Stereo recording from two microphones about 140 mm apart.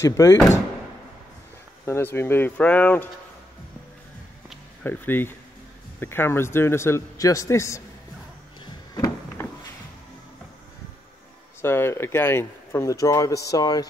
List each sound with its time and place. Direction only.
0.0 s speech: 20° left (ahead or behind)
1.9 s speech: 15° left (ahead or behind)
4.8 s speech: 15° left (ahead or behind)
8.6 s a sound: 25° left (ahead or behind)
11.6 s speech: 15° left (ahead or behind)